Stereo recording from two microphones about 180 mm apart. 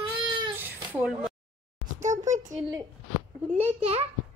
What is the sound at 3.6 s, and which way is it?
Speech, 35° right (ahead or behind).